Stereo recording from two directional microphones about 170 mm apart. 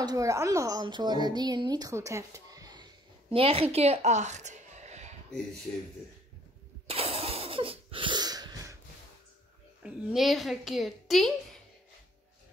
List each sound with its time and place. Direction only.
0.0 s a woman's voice: 20° right (ahead or behind); by 5.1 s 40° right (ahead or behind)
6.9 s sneeze: 35° right (ahead or behind)
9.8 s a child's voice: 5° right (ahead or behind)